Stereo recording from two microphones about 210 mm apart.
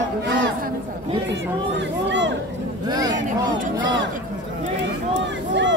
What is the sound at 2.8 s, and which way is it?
Speech, 20° right (ahead or behind).